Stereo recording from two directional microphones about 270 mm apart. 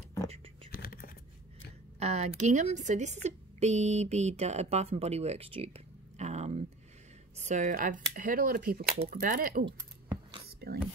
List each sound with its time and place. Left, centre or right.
0.7 s a sound: left
2.0 s a woman's voice: right
10.6 s whispering: right